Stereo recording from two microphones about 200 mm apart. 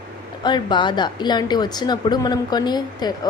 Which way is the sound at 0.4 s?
20° left (ahead or behind).